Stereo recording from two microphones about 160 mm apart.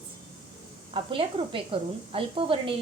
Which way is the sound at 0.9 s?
35° right (ahead or behind).